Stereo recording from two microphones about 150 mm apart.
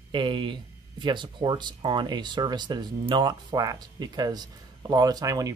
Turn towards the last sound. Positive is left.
turn(degrees=-25)  # may be behind; listen again after turning